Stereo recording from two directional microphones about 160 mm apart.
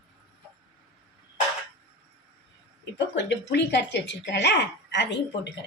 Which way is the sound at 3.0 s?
90° left.